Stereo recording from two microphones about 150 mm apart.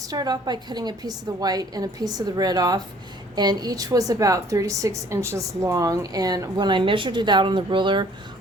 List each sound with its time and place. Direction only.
0.0 s a woman's voice: 25° right (ahead or behind)